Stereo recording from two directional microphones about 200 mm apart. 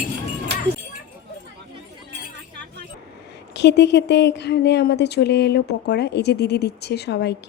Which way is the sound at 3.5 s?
60° left (ahead or behind).